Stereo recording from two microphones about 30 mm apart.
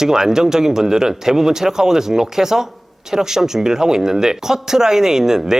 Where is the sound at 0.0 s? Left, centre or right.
Centre.